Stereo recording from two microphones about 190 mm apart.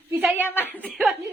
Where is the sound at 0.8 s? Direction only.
Centre (ahead or behind).